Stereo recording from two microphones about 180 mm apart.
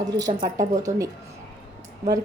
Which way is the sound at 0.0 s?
20° right (ahead or behind).